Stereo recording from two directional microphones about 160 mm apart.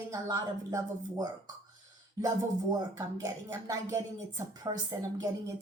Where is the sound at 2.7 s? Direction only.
25° right (ahead or behind).